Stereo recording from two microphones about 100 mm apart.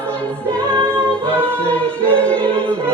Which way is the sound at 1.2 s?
20° right (ahead or behind).